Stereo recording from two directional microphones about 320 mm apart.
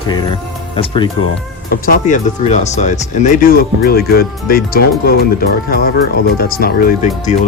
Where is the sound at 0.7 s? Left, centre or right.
Centre.